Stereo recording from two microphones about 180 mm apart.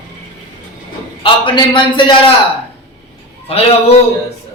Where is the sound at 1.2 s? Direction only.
30° left (ahead or behind).